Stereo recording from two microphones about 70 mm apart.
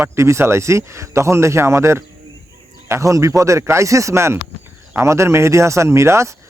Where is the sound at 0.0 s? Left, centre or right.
Right.